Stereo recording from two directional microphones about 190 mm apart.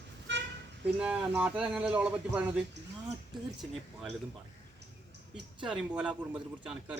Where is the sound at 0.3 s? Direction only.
70° right (ahead or behind).